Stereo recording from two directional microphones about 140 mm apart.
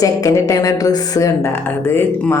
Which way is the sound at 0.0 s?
25° left (ahead or behind).